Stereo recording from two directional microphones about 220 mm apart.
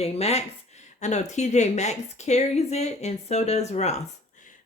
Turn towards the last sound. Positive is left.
turn(degrees=30)  # may be behind; listen again after turning